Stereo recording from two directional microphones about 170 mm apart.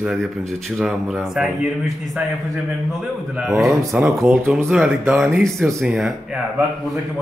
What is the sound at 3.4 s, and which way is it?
Speech, centre (ahead or behind).